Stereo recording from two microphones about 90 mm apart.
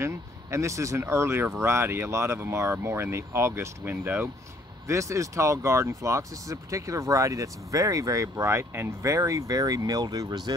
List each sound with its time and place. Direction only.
0.0 s speech: 30° right (ahead or behind)
4.8 s speech: 35° right (ahead or behind)